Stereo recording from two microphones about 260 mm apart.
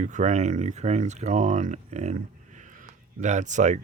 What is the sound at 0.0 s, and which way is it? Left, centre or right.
Speech, right.